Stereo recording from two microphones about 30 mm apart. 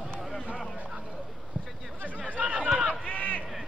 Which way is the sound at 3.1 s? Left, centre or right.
Left.